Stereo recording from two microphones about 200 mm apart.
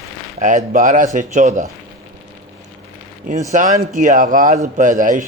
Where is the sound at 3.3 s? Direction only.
40° right (ahead or behind).